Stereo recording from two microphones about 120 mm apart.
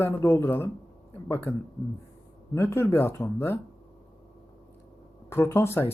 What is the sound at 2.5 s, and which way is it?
Speech, 20° left (ahead or behind).